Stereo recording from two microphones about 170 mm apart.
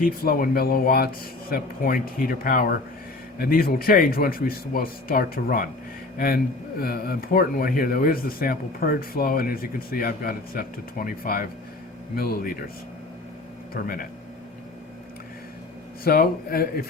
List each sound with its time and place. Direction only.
0.0 s a man's voice: 60° left (ahead or behind)
13.8 s a man's voice: 60° left (ahead or behind)
16.0 s a man's voice: 60° left (ahead or behind)